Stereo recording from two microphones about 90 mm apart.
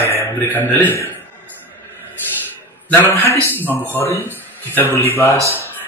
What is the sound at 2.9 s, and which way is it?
A man's voice, 25° left (ahead or behind).